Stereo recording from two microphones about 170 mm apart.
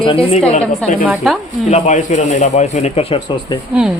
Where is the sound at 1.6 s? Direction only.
45° left (ahead or behind).